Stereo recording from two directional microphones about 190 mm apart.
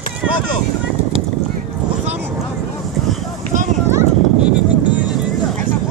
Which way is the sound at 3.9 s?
10° right (ahead or behind).